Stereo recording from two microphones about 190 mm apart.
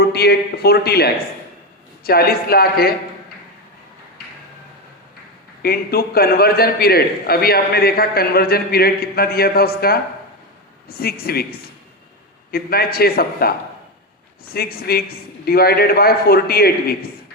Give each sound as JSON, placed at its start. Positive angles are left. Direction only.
{"t": 0.0, "sound": "a man's voice", "side_deg": 60}
{"t": 5.6, "sound": "a man's voice", "side_deg": 55}
{"t": 12.5, "sound": "a man's voice", "side_deg": 55}
{"t": 14.5, "sound": "a man's voice", "side_deg": 55}